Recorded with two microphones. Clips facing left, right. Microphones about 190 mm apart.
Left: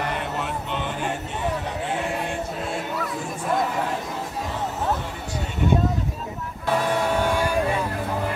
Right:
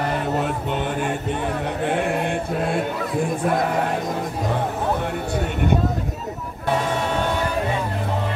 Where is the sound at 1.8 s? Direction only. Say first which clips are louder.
Right 6 dB; 60° right (ahead or behind).